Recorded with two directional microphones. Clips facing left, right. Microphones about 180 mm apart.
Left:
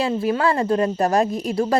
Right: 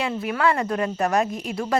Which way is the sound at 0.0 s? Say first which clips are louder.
Left 3 dB; 30° left (ahead or behind).